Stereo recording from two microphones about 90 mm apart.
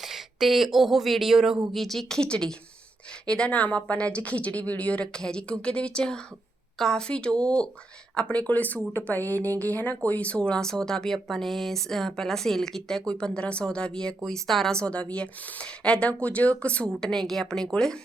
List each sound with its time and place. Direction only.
0.0 s speech: 5° right (ahead or behind)